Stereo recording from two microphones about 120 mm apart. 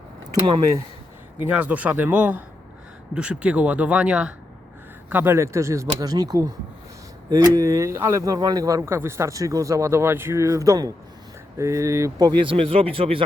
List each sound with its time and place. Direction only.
1.4 s speech: 15° right (ahead or behind); by 8.8 s 30° right (ahead or behind)
8.8 s speech: 20° right (ahead or behind)
12.3 s speech: 45° right (ahead or behind)